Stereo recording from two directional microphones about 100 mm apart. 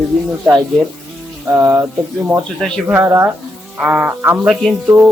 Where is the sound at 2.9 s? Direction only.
25° right (ahead or behind).